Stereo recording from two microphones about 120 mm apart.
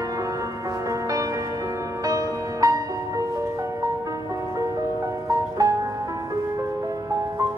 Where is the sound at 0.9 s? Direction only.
30° right (ahead or behind).